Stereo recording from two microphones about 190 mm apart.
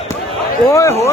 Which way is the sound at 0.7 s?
15° left (ahead or behind).